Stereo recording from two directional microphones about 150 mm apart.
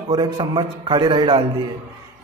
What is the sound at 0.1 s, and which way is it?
A man's voice, 30° right (ahead or behind).